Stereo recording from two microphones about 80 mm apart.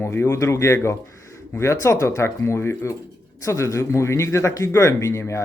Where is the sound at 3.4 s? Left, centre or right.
Left.